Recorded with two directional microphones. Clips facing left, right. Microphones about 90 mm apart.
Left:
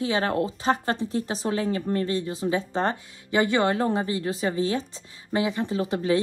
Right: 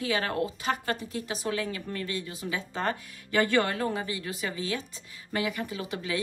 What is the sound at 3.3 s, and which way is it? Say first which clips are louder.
Speech: left 3 dB; 20° left (ahead or behind).